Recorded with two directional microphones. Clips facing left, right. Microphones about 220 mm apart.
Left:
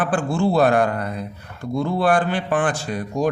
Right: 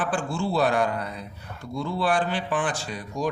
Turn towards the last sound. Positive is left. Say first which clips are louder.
# left 7 dB
turn(degrees=50)  # may be behind; listen again after turning